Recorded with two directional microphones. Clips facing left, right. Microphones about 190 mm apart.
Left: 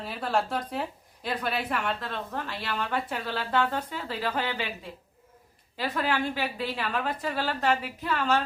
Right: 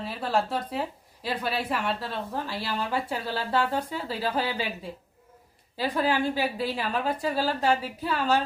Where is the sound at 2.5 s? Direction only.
35° right (ahead or behind).